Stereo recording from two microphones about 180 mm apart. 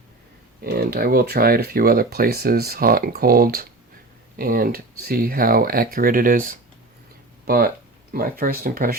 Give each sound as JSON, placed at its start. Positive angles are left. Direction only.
{"t": 0.6, "sound": "speech", "side_deg": -55}